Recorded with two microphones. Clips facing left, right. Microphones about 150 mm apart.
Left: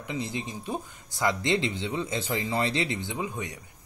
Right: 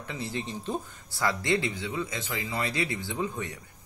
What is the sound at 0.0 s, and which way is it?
Speech, 15° left (ahead or behind).